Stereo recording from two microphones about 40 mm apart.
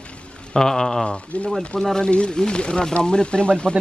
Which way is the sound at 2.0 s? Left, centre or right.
Left.